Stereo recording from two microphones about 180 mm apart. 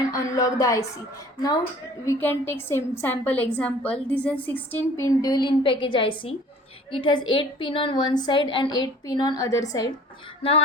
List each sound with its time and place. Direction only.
0.1 s speech: 20° left (ahead or behind)
2.0 s a woman's voice: 15° left (ahead or behind)